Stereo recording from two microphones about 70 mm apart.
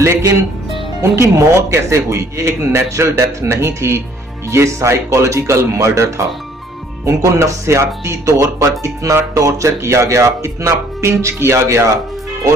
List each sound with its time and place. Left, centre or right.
0.0 s speech: right